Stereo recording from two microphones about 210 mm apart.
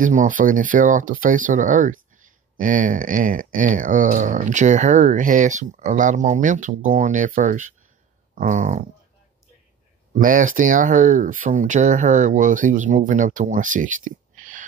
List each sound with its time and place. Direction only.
0.0 s speech: 40° right (ahead or behind)
10.1 s speech: 40° right (ahead or behind)